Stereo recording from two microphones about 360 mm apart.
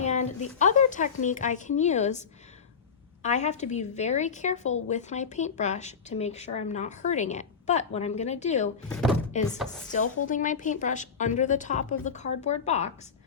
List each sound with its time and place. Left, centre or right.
0.0 s speech: centre
3.2 s speech: centre
8.9 s speech: centre
9.3 s speech: centre